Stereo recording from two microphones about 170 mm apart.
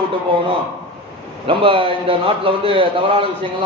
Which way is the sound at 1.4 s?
30° right (ahead or behind).